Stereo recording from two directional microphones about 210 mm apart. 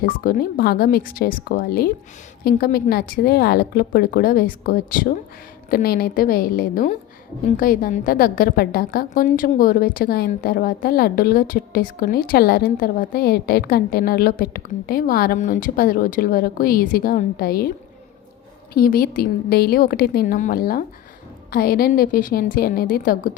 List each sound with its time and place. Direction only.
0.0 s a woman's voice: 45° left (ahead or behind)
18.7 s a woman's voice: 45° left (ahead or behind)